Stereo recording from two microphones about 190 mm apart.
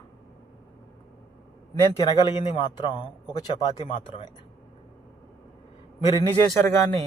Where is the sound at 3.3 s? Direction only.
25° left (ahead or behind).